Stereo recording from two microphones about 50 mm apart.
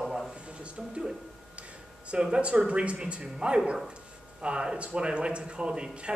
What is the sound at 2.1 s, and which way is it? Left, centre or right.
Speech, right.